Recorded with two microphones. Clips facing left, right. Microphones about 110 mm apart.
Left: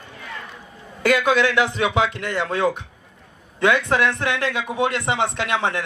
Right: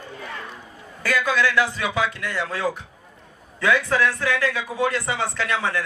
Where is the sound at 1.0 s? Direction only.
20° left (ahead or behind).